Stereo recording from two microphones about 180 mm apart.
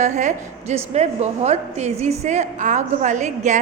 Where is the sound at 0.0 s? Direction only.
40° right (ahead or behind).